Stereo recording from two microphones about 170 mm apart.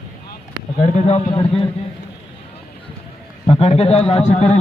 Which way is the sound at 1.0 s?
40° left (ahead or behind).